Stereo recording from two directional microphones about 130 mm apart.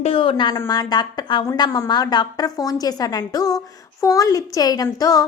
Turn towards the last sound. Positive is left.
turn(degrees=30)  # may be behind; listen again after turning